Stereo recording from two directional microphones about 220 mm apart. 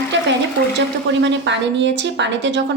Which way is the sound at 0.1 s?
55° right (ahead or behind).